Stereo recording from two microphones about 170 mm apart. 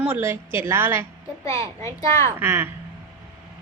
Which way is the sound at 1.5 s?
20° left (ahead or behind).